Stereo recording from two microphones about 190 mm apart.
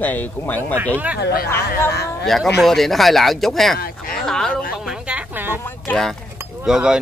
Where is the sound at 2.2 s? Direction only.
Centre (ahead or behind).